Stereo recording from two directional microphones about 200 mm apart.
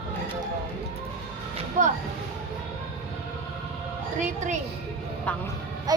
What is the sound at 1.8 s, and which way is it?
Speech, 40° right (ahead or behind).